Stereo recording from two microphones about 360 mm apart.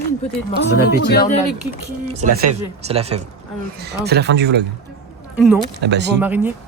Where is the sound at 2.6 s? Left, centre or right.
Centre.